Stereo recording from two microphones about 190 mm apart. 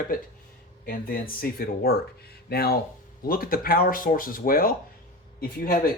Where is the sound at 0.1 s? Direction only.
50° left (ahead or behind).